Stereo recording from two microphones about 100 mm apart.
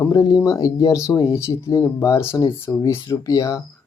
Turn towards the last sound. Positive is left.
turn(degrees=35)  # may be behind; listen again after turning